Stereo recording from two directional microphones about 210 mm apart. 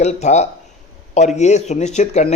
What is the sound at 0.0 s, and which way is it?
A man's voice, 35° left (ahead or behind).